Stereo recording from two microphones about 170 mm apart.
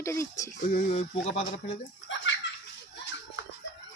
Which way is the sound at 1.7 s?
90° left.